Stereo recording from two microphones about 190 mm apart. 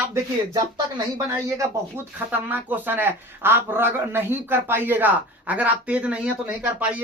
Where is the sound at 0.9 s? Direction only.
15° right (ahead or behind).